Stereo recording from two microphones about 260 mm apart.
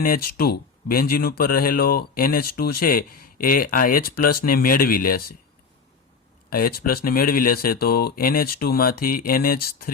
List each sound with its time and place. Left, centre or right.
0.0 s speech: left
6.5 s speech: left